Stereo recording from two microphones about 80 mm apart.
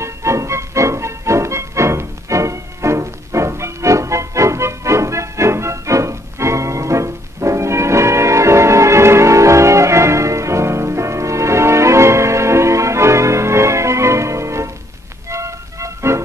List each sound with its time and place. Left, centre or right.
0.0 s music: right